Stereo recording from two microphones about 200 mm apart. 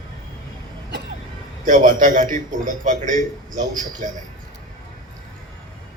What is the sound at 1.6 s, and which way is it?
A man's voice, 40° right (ahead or behind).